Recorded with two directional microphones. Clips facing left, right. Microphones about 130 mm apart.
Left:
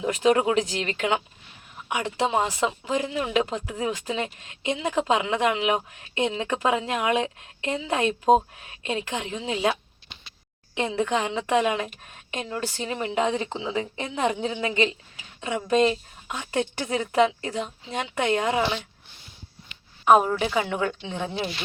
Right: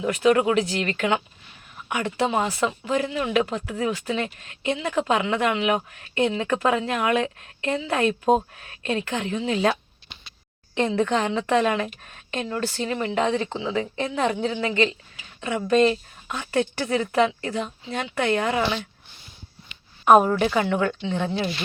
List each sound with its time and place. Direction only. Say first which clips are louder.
0.0 s a woman's voice: right 2 dB; 25° left (ahead or behind)
10.8 s a woman's voice: right 3 dB; 10° left (ahead or behind)
20.2 s speech: right 3 dB; 5° left (ahead or behind)